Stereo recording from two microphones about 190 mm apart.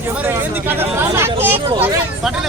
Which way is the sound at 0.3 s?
10° right (ahead or behind).